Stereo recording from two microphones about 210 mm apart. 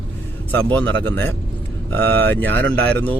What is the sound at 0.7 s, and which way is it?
Speech, 10° left (ahead or behind).